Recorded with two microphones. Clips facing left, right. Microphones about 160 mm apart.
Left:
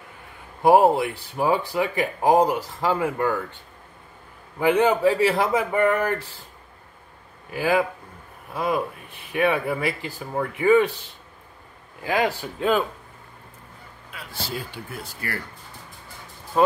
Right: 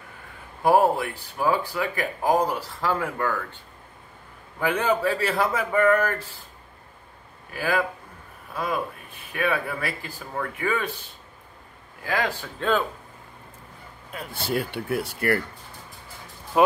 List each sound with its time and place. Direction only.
0.6 s speech: 20° left (ahead or behind)
4.6 s speech: 15° left (ahead or behind)
7.5 s speech: 20° left (ahead or behind)
12.0 s speech: 20° left (ahead or behind)
14.1 s speech: 55° right (ahead or behind)
16.5 s speech: 15° right (ahead or behind)